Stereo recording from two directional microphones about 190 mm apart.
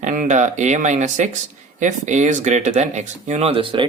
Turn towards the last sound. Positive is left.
turn(degrees=-30)  # may be behind; listen again after turning